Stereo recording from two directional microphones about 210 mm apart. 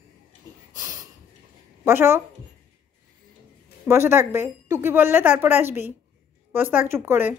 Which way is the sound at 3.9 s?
10° right (ahead or behind).